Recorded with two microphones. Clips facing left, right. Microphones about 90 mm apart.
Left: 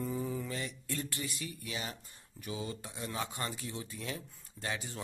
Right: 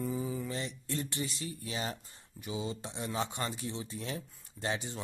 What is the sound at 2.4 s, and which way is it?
Speech, 20° right (ahead or behind).